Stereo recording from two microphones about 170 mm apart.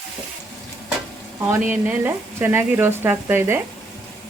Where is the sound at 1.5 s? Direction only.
10° right (ahead or behind).